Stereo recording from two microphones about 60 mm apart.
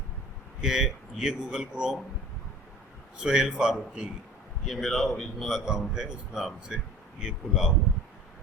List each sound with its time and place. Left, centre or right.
0.6 s a man's voice: centre
3.2 s a man's voice: centre
4.6 s speech: centre
5.5 s a man's voice: centre